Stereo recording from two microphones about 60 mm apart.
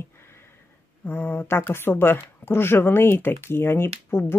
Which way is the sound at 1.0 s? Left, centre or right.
Left.